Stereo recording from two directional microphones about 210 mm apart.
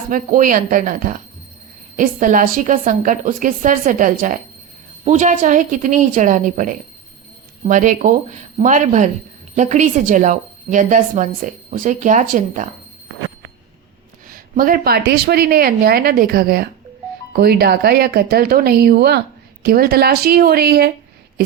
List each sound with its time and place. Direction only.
0.1 s a woman's voice: 40° right (ahead or behind)
14.3 s speech: 45° right (ahead or behind)